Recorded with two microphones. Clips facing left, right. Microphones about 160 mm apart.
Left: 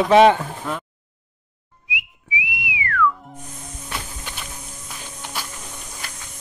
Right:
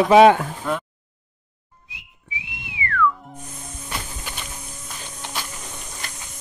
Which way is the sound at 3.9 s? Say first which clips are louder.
Even; centre (ahead or behind).